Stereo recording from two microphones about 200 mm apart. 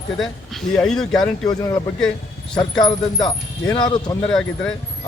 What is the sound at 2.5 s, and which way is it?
Speech, 5° left (ahead or behind).